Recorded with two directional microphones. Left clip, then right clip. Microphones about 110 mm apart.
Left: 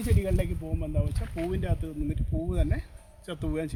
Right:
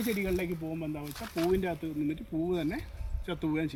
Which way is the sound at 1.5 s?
20° left (ahead or behind).